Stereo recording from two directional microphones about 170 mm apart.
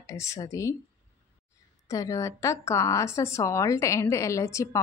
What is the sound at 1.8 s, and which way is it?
Speech, 20° left (ahead or behind).